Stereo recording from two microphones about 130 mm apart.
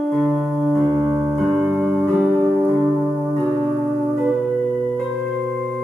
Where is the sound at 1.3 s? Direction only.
Centre (ahead or behind).